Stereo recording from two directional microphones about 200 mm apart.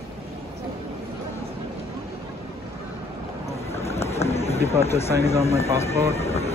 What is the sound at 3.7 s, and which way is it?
Boat, 30° left (ahead or behind).